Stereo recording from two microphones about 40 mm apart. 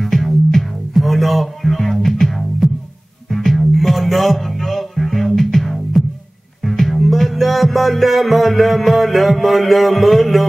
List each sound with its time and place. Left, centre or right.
0.0 s music: centre